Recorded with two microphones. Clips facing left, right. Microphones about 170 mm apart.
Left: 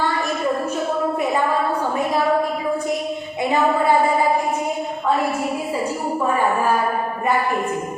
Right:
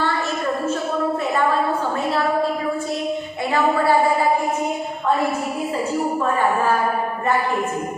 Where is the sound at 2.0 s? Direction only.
15° left (ahead or behind).